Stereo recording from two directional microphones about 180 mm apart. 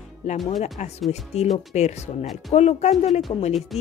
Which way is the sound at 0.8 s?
40° left (ahead or behind).